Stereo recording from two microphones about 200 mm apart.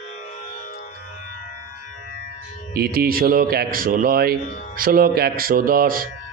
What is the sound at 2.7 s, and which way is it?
Speech, 50° right (ahead or behind).